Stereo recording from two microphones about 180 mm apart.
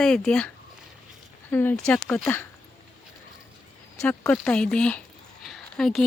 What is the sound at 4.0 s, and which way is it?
Speech, 10° left (ahead or behind).